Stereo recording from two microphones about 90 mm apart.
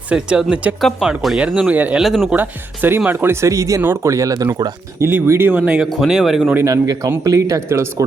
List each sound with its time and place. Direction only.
0.1 s speech: 10° right (ahead or behind)
0.8 s speech: centre (ahead or behind)
1.6 s speech: 20° right (ahead or behind)
2.0 s speech: centre (ahead or behind)
2.3 s speech: 20° right (ahead or behind)
3.5 s speech: 40° right (ahead or behind)
4.9 s speech: 25° right (ahead or behind)
5.5 s speech: 15° right (ahead or behind)
6.0 s speech: 5° right (ahead or behind)
6.7 s speech: 40° right (ahead or behind)